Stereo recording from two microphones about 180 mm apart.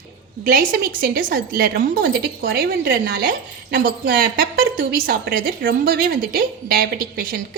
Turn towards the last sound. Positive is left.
turn(degrees=-55)  # may be behind; listen again after turning